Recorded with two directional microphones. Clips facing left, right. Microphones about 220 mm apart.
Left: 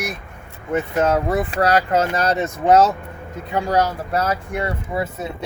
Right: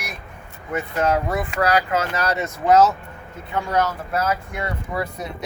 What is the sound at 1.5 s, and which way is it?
Speech, 35° left (ahead or behind).